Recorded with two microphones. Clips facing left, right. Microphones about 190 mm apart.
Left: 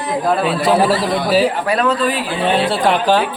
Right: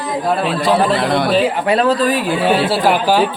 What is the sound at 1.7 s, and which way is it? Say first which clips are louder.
Speech: right 3 dB; 30° right (ahead or behind).